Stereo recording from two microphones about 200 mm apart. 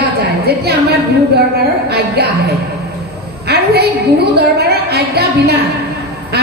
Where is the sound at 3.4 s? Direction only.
50° right (ahead or behind).